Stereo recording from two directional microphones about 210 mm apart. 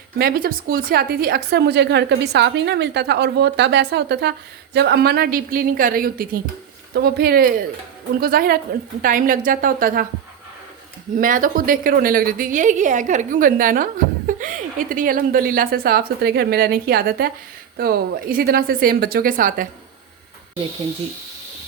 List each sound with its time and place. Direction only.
0.2 s a woman's voice: 45° right (ahead or behind)
11.2 s a woman's voice: 40° right (ahead or behind)